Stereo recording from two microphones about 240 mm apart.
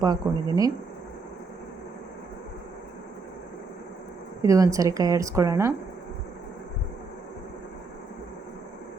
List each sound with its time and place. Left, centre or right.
0.0 s a woman's voice: centre
4.4 s a woman's voice: centre